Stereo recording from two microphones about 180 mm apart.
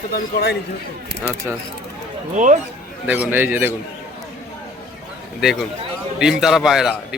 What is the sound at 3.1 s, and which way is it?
Speech, 10° right (ahead or behind).